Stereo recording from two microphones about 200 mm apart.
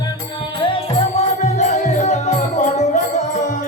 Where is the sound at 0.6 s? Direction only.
25° left (ahead or behind).